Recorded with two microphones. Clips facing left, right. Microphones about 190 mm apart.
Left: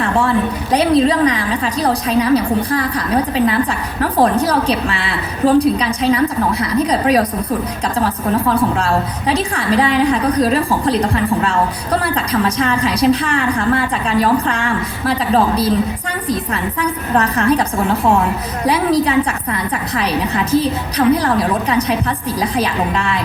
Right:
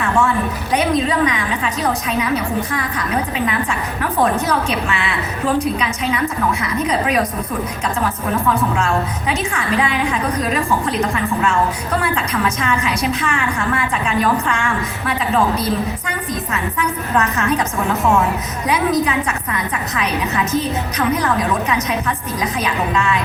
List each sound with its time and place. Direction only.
0.0 s a woman's voice: 35° left (ahead or behind)
16.8 s a woman's voice: 35° left (ahead or behind)